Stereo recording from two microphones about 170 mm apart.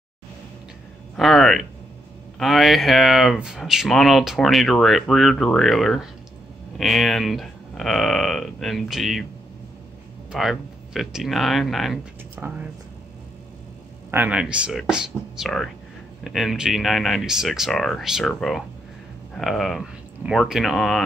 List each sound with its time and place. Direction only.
1.1 s speech: centre (ahead or behind)
10.3 s speech: centre (ahead or behind)
14.1 s speech: 10° right (ahead or behind)